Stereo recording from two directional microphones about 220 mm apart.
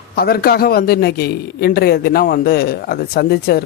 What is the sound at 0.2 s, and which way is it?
Speech, 45° left (ahead or behind).